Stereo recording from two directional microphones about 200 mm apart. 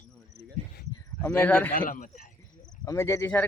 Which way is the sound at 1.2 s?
10° left (ahead or behind).